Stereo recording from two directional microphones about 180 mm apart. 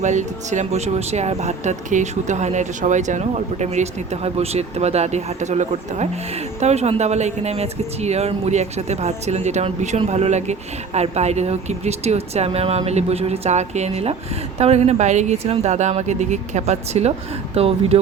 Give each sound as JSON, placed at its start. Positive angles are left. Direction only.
{"t": 0.0, "sound": "speech", "side_deg": -40}